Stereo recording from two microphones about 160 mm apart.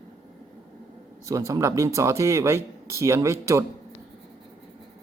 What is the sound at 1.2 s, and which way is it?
Speech, 20° right (ahead or behind).